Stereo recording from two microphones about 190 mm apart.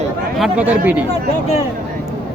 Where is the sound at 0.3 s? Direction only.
5° right (ahead or behind).